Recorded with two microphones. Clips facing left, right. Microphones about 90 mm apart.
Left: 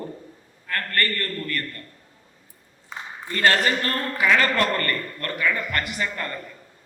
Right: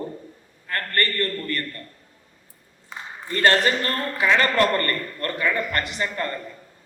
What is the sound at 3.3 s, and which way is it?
A man's voice, 35° right (ahead or behind).